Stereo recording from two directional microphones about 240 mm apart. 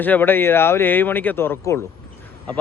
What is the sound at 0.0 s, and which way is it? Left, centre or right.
Speech, centre.